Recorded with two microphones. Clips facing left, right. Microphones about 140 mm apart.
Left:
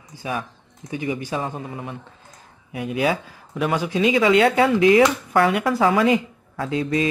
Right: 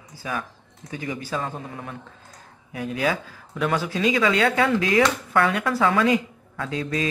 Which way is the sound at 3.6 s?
15° left (ahead or behind).